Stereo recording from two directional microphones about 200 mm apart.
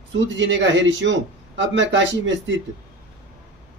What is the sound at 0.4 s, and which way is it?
A man's voice, 65° right (ahead or behind).